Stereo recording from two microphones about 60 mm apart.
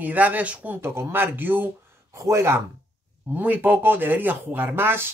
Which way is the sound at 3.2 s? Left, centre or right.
Right.